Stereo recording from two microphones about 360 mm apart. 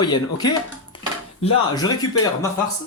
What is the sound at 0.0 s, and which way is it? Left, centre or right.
Speech, centre.